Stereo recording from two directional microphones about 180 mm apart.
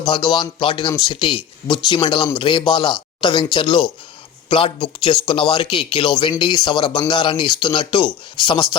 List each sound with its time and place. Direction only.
0.0 s speech: 25° left (ahead or behind)